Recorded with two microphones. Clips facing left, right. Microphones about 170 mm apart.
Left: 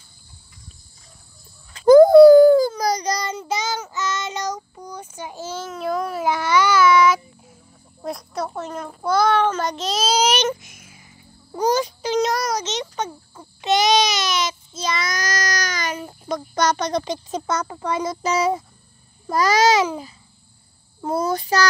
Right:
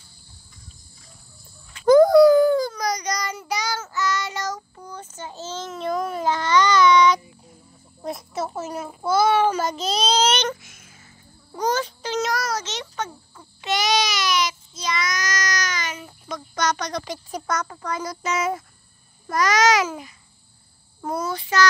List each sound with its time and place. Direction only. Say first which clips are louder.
1.7 s child singing: left 4 dB; 35° left (ahead or behind); by 5.7 s 10° left (ahead or behind)
5.7 s child singing: left 1 dB; centre (ahead or behind)
8.0 s a child's voice: left 1 dB; centre (ahead or behind)
11.6 s a sound: left 4 dB; 10° left (ahead or behind); by 18.6 s 30° left (ahead or behind)
19.3 s a child's voice: left 2 dB; 30° left (ahead or behind)
21.0 s a child's voice: left 4 dB; 25° left (ahead or behind)
21.3 s a child's voice: even; 40° left (ahead or behind)